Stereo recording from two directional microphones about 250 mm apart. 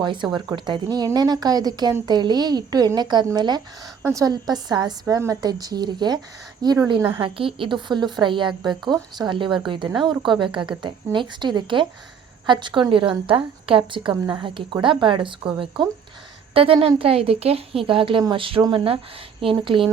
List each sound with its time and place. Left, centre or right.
0.0 s a woman's voice: centre